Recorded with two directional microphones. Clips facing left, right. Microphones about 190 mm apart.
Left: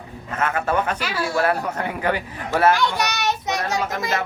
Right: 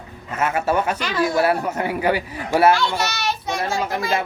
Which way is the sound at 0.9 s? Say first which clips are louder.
Right 4 dB; 10° left (ahead or behind).